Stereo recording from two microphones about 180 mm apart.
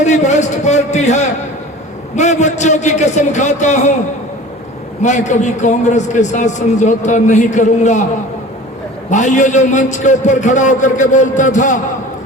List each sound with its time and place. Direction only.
0.0 s a man's voice: 40° left (ahead or behind)
5.0 s a man's voice: 40° left (ahead or behind)
9.0 s a man's voice: 45° left (ahead or behind)